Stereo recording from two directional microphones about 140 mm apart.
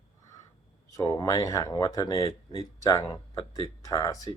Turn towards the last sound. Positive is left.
turn(degrees=25)  # may be behind; listen again after turning